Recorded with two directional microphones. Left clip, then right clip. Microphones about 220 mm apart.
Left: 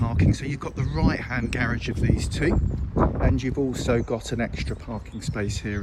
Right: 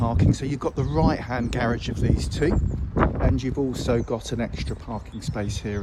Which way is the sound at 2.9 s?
15° left (ahead or behind).